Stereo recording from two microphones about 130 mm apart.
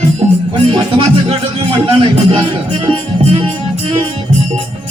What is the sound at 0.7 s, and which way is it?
Music, 40° right (ahead or behind).